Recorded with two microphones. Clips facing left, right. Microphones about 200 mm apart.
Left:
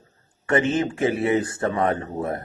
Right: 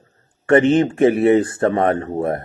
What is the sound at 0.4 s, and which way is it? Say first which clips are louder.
Speech: right 8 dB; 60° right (ahead or behind).